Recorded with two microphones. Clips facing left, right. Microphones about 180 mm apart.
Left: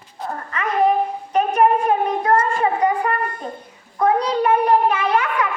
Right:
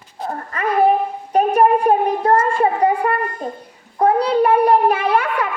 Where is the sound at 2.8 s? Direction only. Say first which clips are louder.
Right 2 dB; 30° right (ahead or behind).